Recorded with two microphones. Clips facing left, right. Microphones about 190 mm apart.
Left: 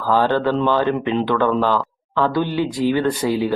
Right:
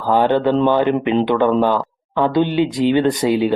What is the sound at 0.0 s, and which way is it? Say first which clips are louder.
Speech: right 2 dB; 20° right (ahead or behind).